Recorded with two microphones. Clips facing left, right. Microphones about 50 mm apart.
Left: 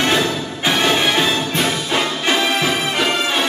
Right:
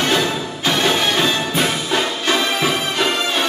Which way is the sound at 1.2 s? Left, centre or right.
Centre.